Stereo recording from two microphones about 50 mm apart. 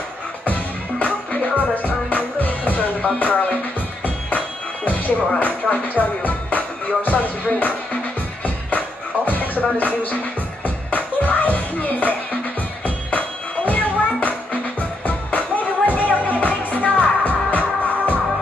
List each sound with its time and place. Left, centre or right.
0.5 s music: left
4.8 s music: left
5.7 s speech: left
6.2 s music: left
13.7 s music: left